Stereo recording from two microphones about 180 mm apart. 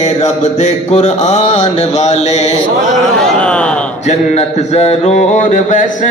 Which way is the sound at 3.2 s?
5° left (ahead or behind).